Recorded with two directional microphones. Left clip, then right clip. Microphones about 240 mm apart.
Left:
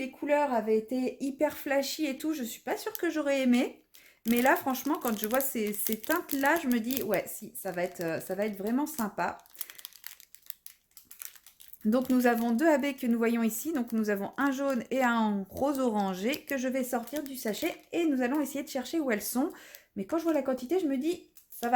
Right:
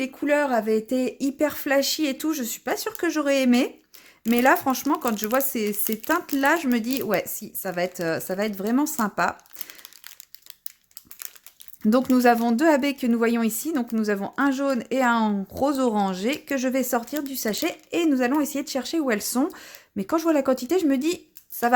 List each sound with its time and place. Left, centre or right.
0.0 s speech: right
9.6 s crumpling: centre
11.9 s speech: right